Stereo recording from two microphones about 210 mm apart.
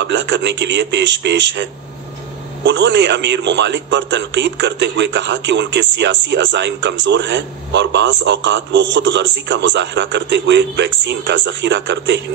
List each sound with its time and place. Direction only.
0.0 s a man's voice: 60° right (ahead or behind)